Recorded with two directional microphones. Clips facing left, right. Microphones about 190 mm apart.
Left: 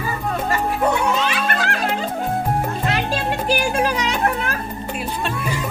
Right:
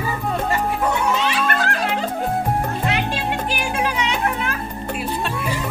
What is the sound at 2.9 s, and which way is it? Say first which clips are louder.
Music: left 1 dB; 40° left (ahead or behind).